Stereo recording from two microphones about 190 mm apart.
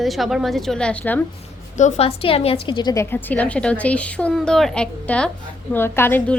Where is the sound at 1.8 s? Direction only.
35° left (ahead or behind).